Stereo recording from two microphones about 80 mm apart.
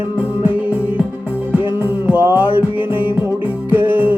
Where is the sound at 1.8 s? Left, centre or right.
Right.